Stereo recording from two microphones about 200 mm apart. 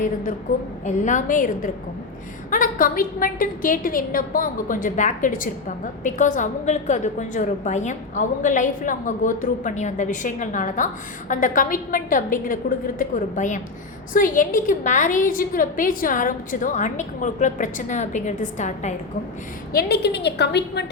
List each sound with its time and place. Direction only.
0.9 s a woman's voice: 40° left (ahead or behind)
19.7 s a woman's voice: 55° left (ahead or behind)